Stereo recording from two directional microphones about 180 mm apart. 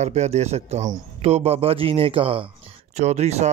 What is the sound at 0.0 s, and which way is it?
A man's voice, 35° right (ahead or behind).